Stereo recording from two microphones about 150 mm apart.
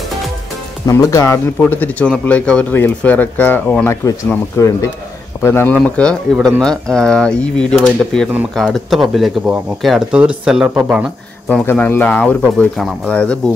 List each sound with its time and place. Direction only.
0.8 s speech: 20° left (ahead or behind)
5.8 s speech: 5° left (ahead or behind)
11.4 s speech: 10° left (ahead or behind)